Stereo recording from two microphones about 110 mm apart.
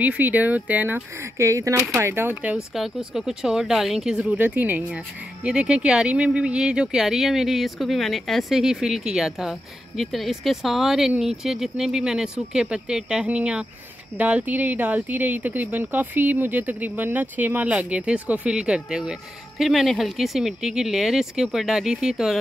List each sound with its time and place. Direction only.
0.0 s speech: 15° right (ahead or behind)
2.7 s speech: 5° right (ahead or behind)